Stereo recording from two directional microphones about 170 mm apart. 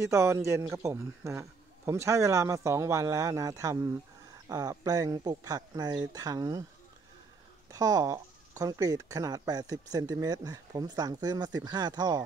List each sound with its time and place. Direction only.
0.0 s a man's voice: 15° right (ahead or behind)
7.7 s speech: 20° right (ahead or behind)